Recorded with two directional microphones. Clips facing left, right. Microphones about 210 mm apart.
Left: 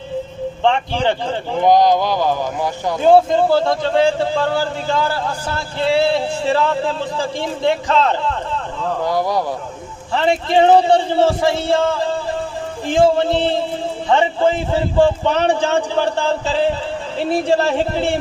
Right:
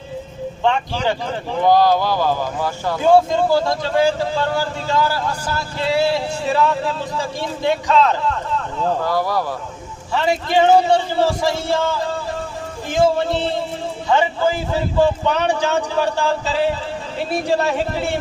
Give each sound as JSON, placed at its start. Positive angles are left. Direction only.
{"t": 0.6, "sound": "speech", "side_deg": 30}
{"t": 1.6, "sound": "speech", "side_deg": 20}
{"t": 3.1, "sound": "speech", "side_deg": 30}
{"t": 9.0, "sound": "speech", "side_deg": 15}
{"t": 10.2, "sound": "speech", "side_deg": 30}